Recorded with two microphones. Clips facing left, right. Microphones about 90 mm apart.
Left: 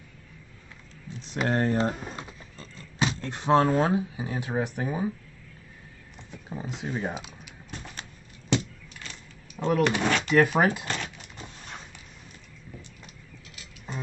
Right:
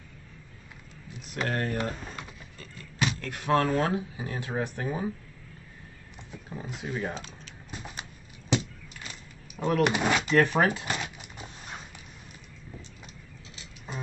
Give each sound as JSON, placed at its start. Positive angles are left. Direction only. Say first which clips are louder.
{"t": 1.3, "sound": "speech", "louder": "left 5 dB", "side_deg": 25}
{"t": 6.5, "sound": "speech", "louder": "left 2 dB", "side_deg": 20}
{"t": 7.7, "sound": "a sound", "louder": "even", "side_deg": -10}
{"t": 8.5, "sound": "vehicle", "louder": "left 1 dB", "side_deg": -10}
{"t": 9.8, "sound": "speech", "louder": "left 1 dB", "side_deg": -10}
{"t": 10.3, "sound": "speech", "louder": "left 2 dB", "side_deg": 10}
{"t": 10.9, "sound": "a sound", "louder": "even", "side_deg": -10}